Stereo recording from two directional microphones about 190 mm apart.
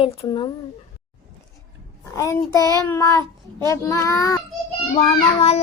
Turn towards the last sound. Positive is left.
turn(degrees=35)  # may be behind; listen again after turning